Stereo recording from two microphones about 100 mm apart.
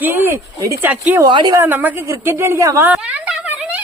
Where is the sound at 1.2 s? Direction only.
50° right (ahead or behind).